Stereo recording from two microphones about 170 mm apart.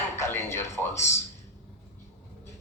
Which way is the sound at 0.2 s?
15° left (ahead or behind).